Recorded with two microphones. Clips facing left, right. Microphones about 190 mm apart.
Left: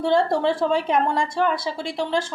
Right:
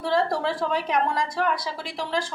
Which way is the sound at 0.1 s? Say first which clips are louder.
Left 3 dB; 25° left (ahead or behind).